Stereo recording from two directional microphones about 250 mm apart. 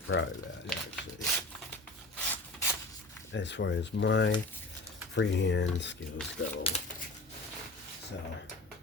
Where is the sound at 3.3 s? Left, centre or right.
Left.